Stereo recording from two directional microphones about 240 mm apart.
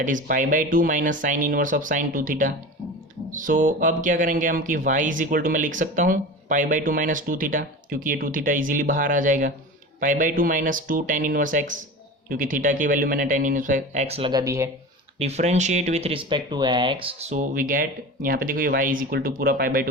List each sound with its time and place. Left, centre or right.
0.0 s speech: right; by 14.7 s centre
15.2 s speech: right